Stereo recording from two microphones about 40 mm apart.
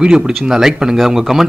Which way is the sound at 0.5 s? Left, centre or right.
Centre.